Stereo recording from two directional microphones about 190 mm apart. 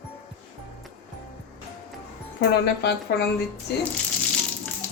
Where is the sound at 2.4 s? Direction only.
60° left (ahead or behind).